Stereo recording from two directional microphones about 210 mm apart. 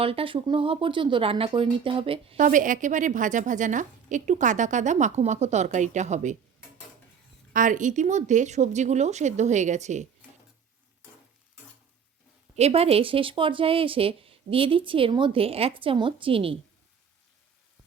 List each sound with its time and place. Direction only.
0.0 s speech: 25° right (ahead or behind)
7.5 s speech: 40° right (ahead or behind)
12.5 s speech: 30° right (ahead or behind)